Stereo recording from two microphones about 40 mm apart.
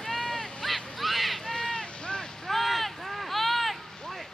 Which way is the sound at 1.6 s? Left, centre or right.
Centre.